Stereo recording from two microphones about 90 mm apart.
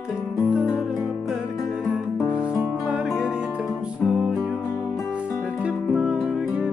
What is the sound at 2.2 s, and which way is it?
Music, 10° right (ahead or behind).